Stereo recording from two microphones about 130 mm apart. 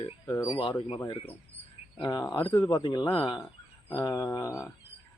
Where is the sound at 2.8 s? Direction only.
40° left (ahead or behind).